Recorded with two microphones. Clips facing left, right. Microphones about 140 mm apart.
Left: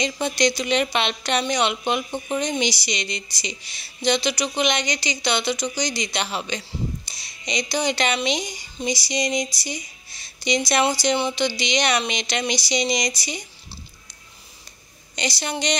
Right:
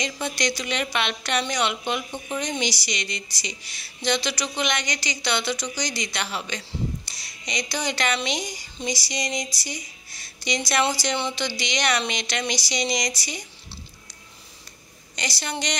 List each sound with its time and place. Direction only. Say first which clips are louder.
0.0 s a woman's voice: left 5 dB; 25° left (ahead or behind)
15.1 s a woman's voice: left 4 dB; 20° left (ahead or behind)